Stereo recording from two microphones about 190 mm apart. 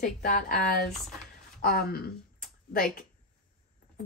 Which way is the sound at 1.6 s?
55° left (ahead or behind).